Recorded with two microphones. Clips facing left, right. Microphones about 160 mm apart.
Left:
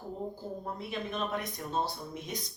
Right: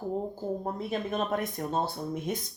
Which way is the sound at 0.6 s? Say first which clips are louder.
Right 5 dB; 45° right (ahead or behind).